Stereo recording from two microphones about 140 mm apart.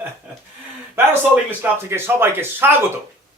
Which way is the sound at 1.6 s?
15° right (ahead or behind).